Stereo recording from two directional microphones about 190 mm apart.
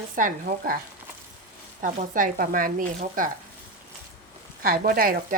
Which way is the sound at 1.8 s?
45° right (ahead or behind).